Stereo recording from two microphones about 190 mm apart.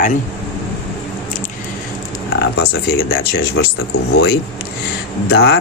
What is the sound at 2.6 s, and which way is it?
Speech, 55° left (ahead or behind).